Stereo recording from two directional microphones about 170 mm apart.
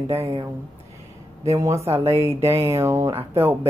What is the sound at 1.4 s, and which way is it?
Speech, 15° right (ahead or behind).